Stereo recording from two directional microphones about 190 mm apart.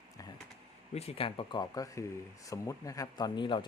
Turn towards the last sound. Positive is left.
turn(degrees=25)  # may be behind; listen again after turning